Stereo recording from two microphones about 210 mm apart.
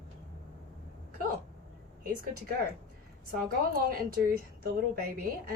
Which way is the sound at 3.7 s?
45° right (ahead or behind).